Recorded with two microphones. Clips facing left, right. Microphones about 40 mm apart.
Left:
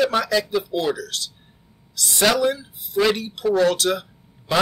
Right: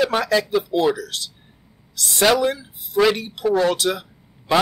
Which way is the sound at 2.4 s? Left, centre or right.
Right.